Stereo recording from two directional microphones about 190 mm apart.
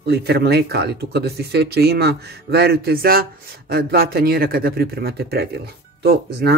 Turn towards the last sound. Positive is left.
turn(degrees=-60)  # may be behind; listen again after turning